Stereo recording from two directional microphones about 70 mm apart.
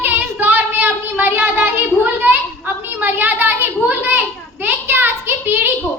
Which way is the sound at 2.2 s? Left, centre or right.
Right.